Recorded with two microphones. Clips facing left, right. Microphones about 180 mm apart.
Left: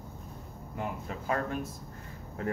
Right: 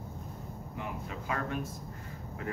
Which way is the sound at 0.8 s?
40° left (ahead or behind).